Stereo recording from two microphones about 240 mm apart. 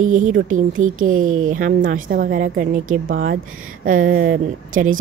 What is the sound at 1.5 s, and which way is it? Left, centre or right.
Speech, right.